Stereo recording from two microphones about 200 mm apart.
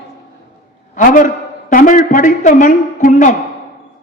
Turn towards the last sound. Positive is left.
turn(degrees=40)  # may be behind; listen again after turning